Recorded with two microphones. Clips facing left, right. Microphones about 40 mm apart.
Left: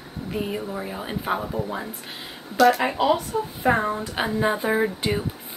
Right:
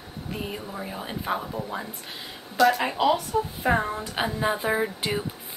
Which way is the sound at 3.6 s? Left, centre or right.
Centre.